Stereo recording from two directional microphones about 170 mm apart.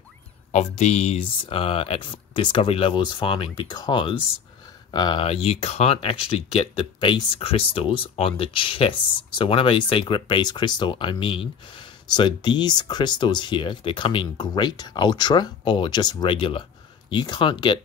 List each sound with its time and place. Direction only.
0.5 s speech: 40° left (ahead or behind)